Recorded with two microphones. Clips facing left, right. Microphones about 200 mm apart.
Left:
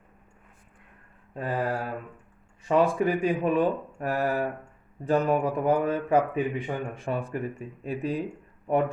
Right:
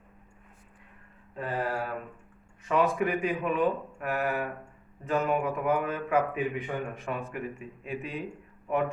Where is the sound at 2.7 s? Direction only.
30° left (ahead or behind).